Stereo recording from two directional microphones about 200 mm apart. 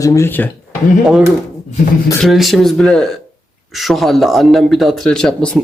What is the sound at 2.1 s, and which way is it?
Speech, centre (ahead or behind).